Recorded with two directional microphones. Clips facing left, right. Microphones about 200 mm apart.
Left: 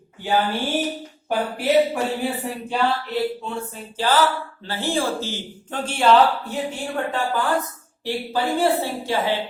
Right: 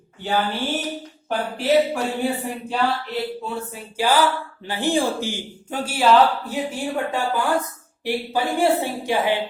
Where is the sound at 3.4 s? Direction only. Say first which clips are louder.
Even; 5° right (ahead or behind).